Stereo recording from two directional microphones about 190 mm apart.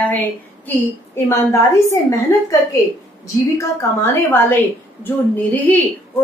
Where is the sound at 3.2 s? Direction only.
15° left (ahead or behind).